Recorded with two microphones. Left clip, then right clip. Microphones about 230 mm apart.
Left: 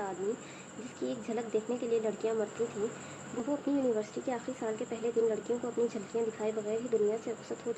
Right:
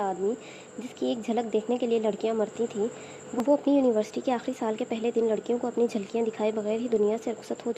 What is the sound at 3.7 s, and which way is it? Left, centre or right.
A woman's voice, right.